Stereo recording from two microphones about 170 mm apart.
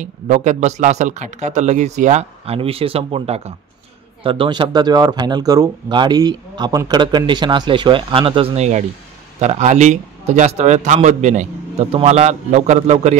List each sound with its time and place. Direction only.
0.0 s a man's voice: 45° right (ahead or behind)